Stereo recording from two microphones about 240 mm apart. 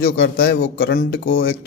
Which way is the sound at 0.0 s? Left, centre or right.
Left.